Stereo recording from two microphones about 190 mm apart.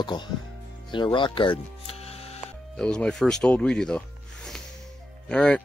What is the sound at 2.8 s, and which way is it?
Speech, 5° left (ahead or behind).